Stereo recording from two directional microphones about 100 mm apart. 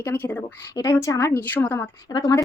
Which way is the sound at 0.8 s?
30° left (ahead or behind).